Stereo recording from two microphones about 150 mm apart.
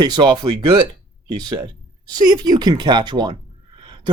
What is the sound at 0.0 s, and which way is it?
Speech, 30° right (ahead or behind).